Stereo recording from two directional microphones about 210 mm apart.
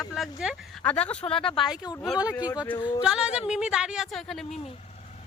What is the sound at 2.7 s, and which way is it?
Speech, 20° left (ahead or behind).